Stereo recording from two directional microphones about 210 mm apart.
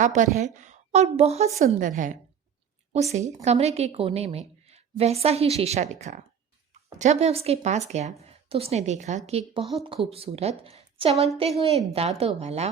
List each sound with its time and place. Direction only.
0.0 s a woman's voice: 35° right (ahead or behind)
2.9 s a woman's voice: 30° right (ahead or behind)